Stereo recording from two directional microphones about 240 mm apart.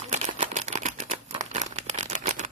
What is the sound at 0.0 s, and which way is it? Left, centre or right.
Crumpling, right.